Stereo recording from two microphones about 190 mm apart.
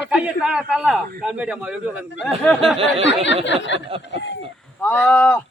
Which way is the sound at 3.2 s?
70° left (ahead or behind).